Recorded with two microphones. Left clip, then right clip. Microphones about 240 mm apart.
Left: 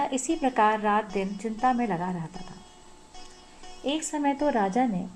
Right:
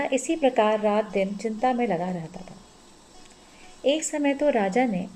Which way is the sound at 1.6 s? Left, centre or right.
Left.